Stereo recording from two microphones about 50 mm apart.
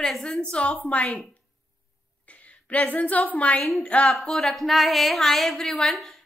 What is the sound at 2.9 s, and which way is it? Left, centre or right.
A woman's voice, left.